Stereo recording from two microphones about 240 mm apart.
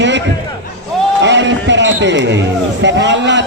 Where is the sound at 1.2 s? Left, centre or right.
Right.